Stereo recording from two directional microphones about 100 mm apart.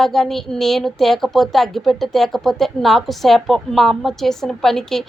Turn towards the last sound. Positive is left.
turn(degrees=5)  # may be behind; listen again after turning